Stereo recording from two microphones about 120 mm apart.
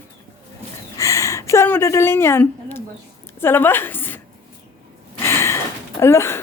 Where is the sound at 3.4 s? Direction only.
20° left (ahead or behind).